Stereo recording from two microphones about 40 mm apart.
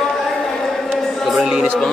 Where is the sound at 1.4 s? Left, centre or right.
Centre.